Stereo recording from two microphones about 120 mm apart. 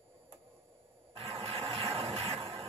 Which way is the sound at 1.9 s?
50° right (ahead or behind).